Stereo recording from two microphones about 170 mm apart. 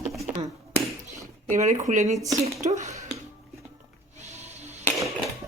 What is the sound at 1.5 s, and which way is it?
Speech, 45° right (ahead or behind).